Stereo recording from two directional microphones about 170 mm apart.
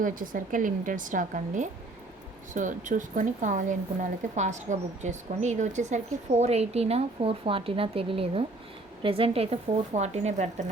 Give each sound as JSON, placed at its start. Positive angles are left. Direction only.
{"t": 0.0, "sound": "a woman's voice", "side_deg": -55}